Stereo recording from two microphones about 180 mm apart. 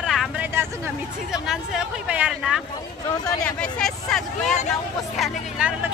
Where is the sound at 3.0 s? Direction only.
20° left (ahead or behind).